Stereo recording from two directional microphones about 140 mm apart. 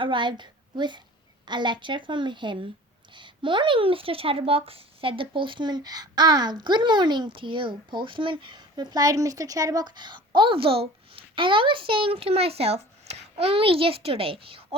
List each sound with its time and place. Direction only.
0.0 s a woman's voice: 35° right (ahead or behind)